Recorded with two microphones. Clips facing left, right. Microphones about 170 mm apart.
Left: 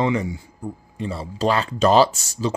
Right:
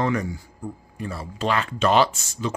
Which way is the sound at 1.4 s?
35° left (ahead or behind).